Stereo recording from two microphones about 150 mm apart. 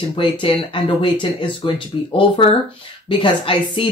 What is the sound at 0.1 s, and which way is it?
Speech, 35° left (ahead or behind).